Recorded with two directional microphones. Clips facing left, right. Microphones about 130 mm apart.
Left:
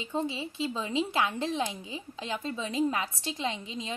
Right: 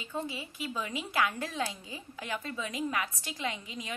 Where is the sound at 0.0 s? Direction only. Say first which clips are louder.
Left 5 dB; 25° left (ahead or behind).